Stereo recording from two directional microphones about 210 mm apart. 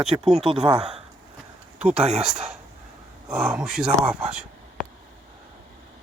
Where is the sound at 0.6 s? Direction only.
20° right (ahead or behind).